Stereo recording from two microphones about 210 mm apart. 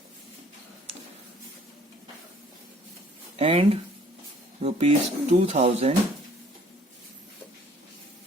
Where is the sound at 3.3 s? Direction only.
25° right (ahead or behind).